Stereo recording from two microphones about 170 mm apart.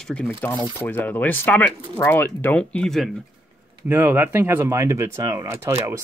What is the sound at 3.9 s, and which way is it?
Speech, 10° right (ahead or behind).